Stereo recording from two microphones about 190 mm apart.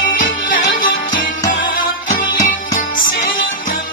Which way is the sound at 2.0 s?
40° left (ahead or behind).